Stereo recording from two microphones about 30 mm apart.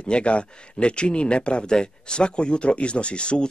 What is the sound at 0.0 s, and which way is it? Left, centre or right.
Speech, left.